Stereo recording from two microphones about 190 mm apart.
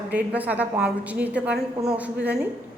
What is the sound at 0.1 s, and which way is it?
A woman's voice, 10° right (ahead or behind).